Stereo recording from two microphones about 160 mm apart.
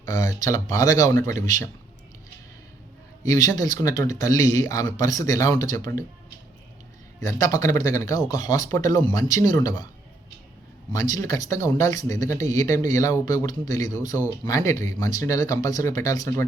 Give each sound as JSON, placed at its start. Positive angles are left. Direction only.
{"t": 0.0, "sound": "speech", "side_deg": 20}
{"t": 3.2, "sound": "speech", "side_deg": 20}
{"t": 7.2, "sound": "speech", "side_deg": 20}
{"t": 10.9, "sound": "speech", "side_deg": 20}